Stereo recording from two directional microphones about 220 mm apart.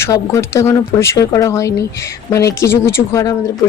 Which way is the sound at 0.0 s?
15° left (ahead or behind).